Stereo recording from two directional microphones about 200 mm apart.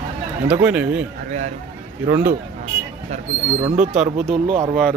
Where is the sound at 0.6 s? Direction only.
5° right (ahead or behind).